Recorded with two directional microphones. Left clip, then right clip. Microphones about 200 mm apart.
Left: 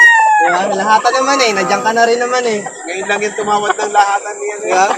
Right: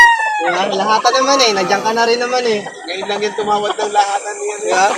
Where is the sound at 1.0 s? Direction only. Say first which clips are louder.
Even; 20° left (ahead or behind).